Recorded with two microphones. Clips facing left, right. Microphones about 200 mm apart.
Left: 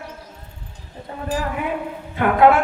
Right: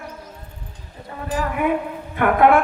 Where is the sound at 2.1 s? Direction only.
55° right (ahead or behind).